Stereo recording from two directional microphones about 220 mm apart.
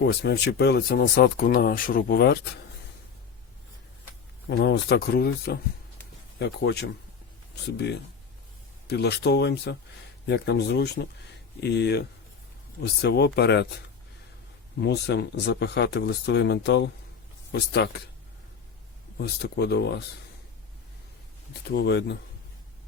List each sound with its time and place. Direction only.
0.0 s speech: 50° left (ahead or behind)
4.4 s speech: 50° left (ahead or behind)
8.9 s speech: 45° left (ahead or behind)
14.8 s speech: 50° left (ahead or behind)
19.2 s speech: 45° left (ahead or behind)
21.7 s speech: 50° left (ahead or behind)